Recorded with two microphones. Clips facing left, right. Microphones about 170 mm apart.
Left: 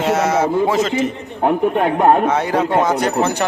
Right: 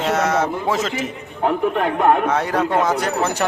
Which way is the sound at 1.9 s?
35° left (ahead or behind).